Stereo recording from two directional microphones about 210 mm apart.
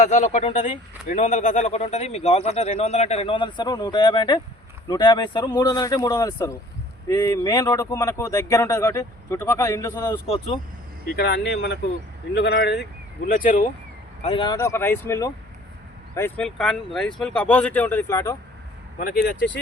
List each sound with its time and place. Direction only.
0.0 s speech: 35° left (ahead or behind)
11.2 s speech: 55° left (ahead or behind)
13.2 s speech: 40° left (ahead or behind)
14.2 s speech: 25° left (ahead or behind)